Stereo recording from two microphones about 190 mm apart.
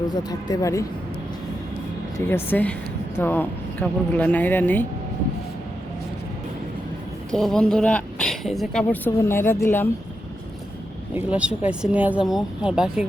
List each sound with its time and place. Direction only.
0.1 s speech: 20° left (ahead or behind)
2.2 s speech: 10° left (ahead or behind)
7.3 s a woman's voice: 5° left (ahead or behind)
11.1 s a woman's voice: 5° right (ahead or behind)